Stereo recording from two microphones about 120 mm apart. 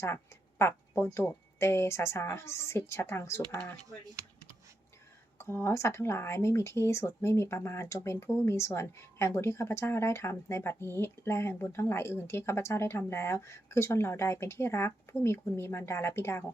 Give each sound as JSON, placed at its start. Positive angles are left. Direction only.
{"t": 0.6, "sound": "speech", "side_deg": 20}
{"t": 5.4, "sound": "speech", "side_deg": 20}